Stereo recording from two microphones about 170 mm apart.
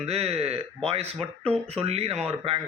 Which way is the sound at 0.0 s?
35° right (ahead or behind).